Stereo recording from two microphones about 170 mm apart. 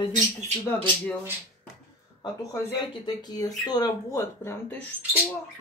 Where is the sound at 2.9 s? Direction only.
25° left (ahead or behind).